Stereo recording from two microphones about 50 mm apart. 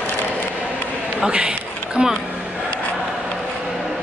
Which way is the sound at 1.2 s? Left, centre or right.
Centre.